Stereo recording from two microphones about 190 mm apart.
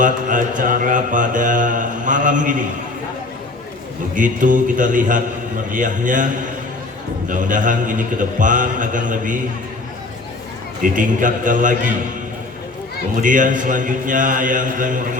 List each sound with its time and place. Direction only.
0.0 s mantra: 45° right (ahead or behind)
4.1 s mantra: 45° right (ahead or behind)
7.3 s mantra: 45° right (ahead or behind)
10.8 s mantra: 45° right (ahead or behind)
13.2 s mantra: 45° right (ahead or behind)